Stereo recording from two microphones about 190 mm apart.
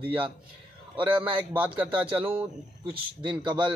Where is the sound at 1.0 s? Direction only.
10° right (ahead or behind).